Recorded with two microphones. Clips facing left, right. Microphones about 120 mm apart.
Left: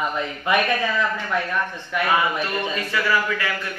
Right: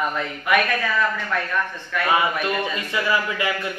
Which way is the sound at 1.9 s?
20° left (ahead or behind).